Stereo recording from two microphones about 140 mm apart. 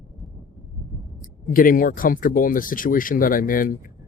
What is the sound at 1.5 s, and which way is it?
Speech, 85° left.